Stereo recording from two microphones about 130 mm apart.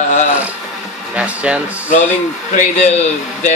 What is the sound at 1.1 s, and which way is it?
Speech, 10° right (ahead or behind).